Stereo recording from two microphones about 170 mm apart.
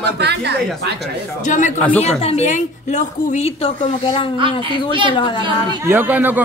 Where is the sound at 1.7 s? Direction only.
10° left (ahead or behind).